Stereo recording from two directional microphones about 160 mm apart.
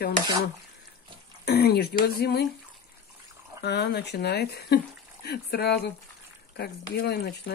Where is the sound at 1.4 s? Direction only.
85° left.